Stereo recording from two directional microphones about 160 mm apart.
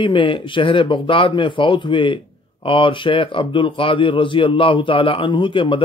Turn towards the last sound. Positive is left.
turn(degrees=30)  # may be behind; listen again after turning